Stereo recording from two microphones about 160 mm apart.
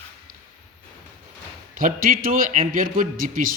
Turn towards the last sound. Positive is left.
turn(degrees=-60)  # may be behind; listen again after turning